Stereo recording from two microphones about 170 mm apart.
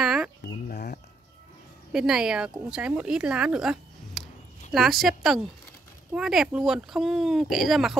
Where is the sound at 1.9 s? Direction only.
5° right (ahead or behind).